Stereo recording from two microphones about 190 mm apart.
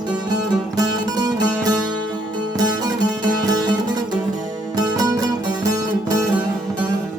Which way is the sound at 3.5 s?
20° right (ahead or behind).